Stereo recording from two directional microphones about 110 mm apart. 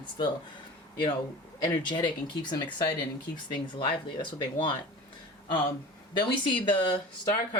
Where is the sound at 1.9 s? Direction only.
45° left (ahead or behind).